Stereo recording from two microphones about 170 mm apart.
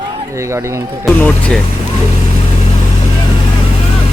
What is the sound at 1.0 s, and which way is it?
Speech, 5° left (ahead or behind).